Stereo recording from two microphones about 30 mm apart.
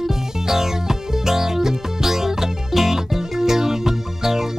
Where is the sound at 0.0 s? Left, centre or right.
Centre.